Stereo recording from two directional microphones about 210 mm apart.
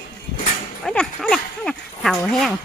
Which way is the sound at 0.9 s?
5° left (ahead or behind).